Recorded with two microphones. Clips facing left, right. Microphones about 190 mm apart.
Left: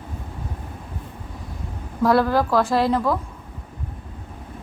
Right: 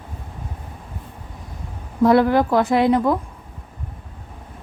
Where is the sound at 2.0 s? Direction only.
20° right (ahead or behind).